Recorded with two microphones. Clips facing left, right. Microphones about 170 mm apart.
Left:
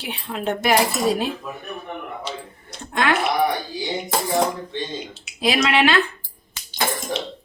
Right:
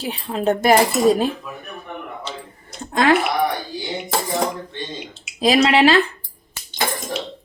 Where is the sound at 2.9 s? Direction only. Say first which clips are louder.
Right 5 dB; 35° right (ahead or behind).